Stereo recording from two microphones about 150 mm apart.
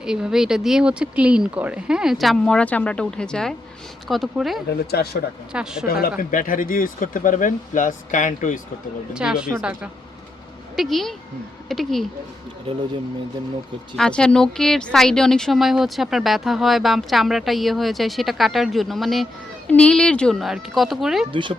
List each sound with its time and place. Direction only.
0.0 s speech: 5° right (ahead or behind)
4.9 s speech: 90° left
5.5 s speech: 5° right (ahead or behind)
5.9 s speech: 75° left (ahead or behind); by 8.6 s 55° left (ahead or behind)
9.1 s speech: 5° right (ahead or behind)
13.9 s speech: 5° left (ahead or behind)
21.2 s speech: 35° right (ahead or behind)